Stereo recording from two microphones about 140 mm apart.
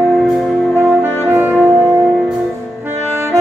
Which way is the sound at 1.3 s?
15° right (ahead or behind).